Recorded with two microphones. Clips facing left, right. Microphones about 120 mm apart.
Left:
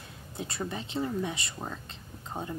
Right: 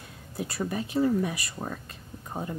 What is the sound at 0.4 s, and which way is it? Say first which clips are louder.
A woman's voice: right 4 dB; 25° left (ahead or behind).